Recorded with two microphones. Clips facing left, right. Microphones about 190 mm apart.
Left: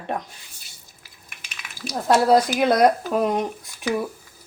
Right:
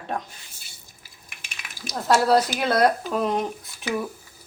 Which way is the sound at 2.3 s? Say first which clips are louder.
Left 3 dB; 10° left (ahead or behind).